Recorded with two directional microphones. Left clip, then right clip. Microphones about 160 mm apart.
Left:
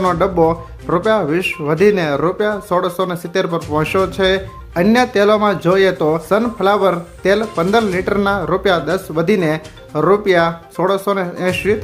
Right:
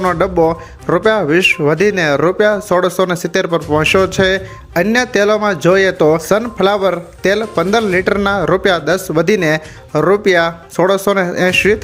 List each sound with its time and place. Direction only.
0.0 s speech: 25° right (ahead or behind)